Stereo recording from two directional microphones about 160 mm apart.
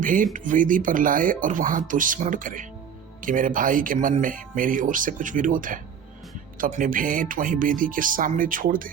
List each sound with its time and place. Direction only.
0.0 s speech: 55° right (ahead or behind)